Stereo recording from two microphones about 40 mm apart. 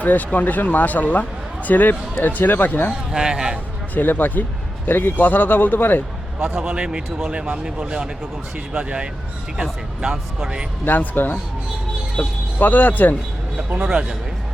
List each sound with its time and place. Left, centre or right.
0.0 s speech: left
3.1 s speech: centre
3.9 s speech: left
6.6 s speech: centre
10.8 s speech: left
12.2 s speech: left
13.7 s speech: right